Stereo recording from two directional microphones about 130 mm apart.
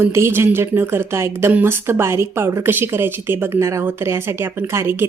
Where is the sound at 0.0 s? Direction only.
20° right (ahead or behind).